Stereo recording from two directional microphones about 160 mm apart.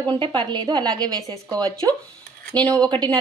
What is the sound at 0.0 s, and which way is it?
A woman's voice, 30° right (ahead or behind).